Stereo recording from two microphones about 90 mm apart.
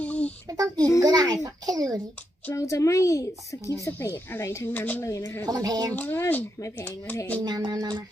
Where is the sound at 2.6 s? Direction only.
35° left (ahead or behind); by 5.0 s 20° left (ahead or behind).